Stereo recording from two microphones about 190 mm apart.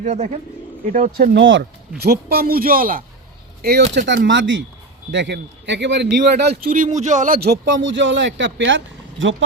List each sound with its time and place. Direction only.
0.0 s speech: 40° right (ahead or behind); by 1.6 s 75° right (ahead or behind)
2.0 s speech: 55° right (ahead or behind)
3.6 s a man's voice: 55° right (ahead or behind); by 4.6 s 80° right
5.1 s a man's voice: 70° right (ahead or behind)